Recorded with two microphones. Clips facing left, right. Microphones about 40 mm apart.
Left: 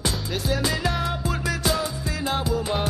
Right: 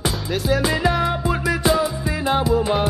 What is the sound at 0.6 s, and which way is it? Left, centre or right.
Music, centre.